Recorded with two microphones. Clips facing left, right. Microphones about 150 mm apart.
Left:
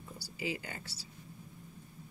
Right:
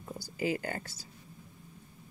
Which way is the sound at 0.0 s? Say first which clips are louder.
Right 6 dB; 50° right (ahead or behind).